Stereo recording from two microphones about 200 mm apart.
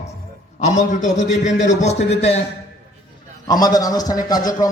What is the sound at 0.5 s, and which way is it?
A man's voice, 35° left (ahead or behind).